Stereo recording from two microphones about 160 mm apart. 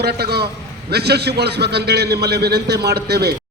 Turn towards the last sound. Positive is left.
turn(degrees=-80)